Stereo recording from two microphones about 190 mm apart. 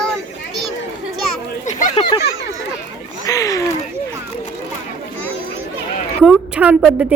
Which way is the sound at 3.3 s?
15° left (ahead or behind).